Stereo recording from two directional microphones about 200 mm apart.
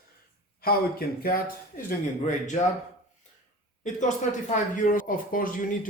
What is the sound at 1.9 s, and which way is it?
Speech, 40° left (ahead or behind).